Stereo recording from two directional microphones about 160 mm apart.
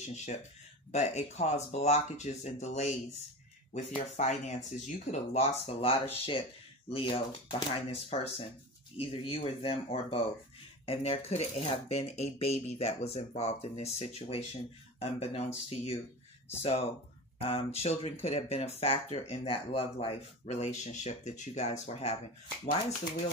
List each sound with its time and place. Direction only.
0.0 s speech: 45° left (ahead or behind)